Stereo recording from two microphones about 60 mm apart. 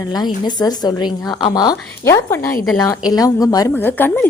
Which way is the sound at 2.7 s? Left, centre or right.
Left.